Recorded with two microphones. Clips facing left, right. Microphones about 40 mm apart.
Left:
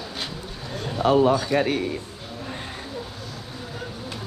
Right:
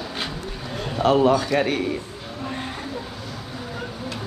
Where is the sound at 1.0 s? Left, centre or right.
Right.